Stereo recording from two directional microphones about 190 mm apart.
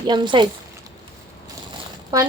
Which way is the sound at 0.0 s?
25° right (ahead or behind).